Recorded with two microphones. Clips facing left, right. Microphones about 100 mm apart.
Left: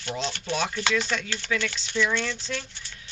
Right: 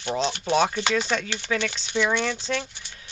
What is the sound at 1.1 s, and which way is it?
Speech, 40° right (ahead or behind).